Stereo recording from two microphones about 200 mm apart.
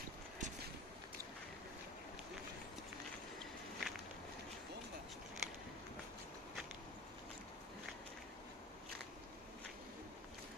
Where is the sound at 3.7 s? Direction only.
Centre (ahead or behind).